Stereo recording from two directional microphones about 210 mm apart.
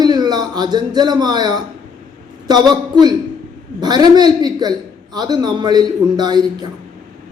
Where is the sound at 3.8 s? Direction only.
20° right (ahead or behind).